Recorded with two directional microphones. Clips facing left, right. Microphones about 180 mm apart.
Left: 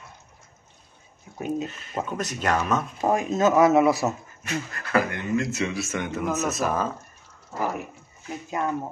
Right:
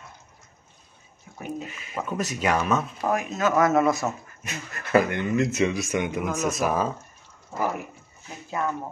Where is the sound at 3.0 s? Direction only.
25° left (ahead or behind).